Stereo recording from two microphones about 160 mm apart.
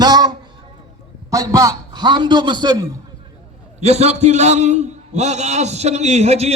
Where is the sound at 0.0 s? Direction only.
25° right (ahead or behind).